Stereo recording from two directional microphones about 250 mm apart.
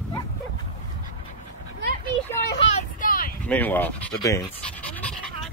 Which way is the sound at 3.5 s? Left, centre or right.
Centre.